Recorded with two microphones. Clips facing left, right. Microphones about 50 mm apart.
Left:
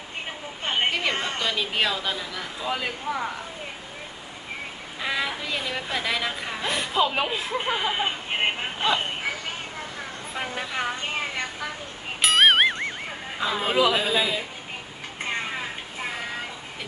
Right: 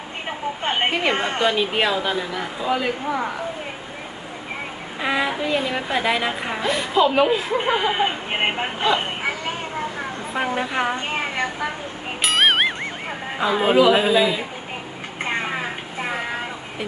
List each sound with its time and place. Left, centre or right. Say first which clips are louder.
0.3 s a woman's voice: right 8 dB; right
2.6 s speech: right 6 dB; centre
4.9 s speech: right 6 dB; right
6.6 s speech: right 5 dB; centre
7.6 s speech: right 6 dB; right
10.3 s speech: right 7 dB; right
12.2 s music: even; centre
13.1 s a man's voice: right 10 dB; right
15.2 s vehicle: right 5 dB; right